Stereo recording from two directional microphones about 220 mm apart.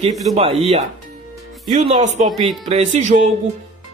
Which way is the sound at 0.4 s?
25° right (ahead or behind).